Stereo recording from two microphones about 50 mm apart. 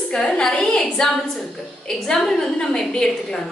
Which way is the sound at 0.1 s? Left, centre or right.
Centre.